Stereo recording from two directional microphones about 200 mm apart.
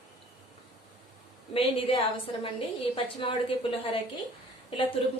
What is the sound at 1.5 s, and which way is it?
A woman's voice, 25° left (ahead or behind).